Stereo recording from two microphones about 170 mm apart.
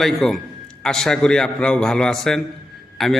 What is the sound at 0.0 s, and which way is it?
A man's voice, centre (ahead or behind).